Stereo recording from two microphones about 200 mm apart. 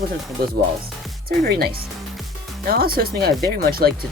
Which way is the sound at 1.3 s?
50° right (ahead or behind).